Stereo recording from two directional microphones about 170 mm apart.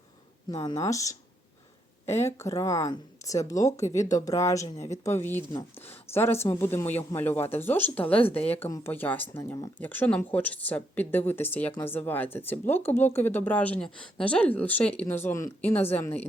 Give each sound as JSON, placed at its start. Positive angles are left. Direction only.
{"t": 0.6, "sound": "speech", "side_deg": 20}